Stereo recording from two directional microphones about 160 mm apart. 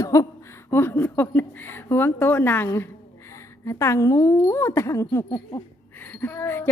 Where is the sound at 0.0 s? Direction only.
20° left (ahead or behind).